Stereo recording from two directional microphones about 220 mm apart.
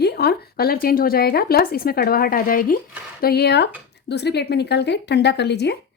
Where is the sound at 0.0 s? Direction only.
45° left (ahead or behind).